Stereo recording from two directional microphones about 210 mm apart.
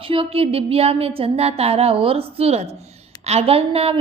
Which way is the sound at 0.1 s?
25° right (ahead or behind).